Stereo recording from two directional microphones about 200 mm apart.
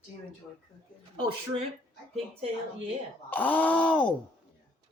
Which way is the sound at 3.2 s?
10° left (ahead or behind).